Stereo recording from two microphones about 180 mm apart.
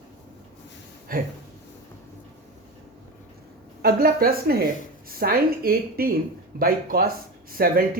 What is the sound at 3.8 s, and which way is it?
Speech, 55° right (ahead or behind).